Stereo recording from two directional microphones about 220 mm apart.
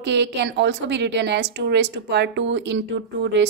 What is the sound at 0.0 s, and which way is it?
A woman's voice, 50° right (ahead or behind).